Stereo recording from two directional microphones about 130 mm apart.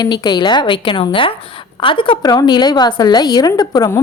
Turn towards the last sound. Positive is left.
turn(degrees=30)  # may be behind; listen again after turning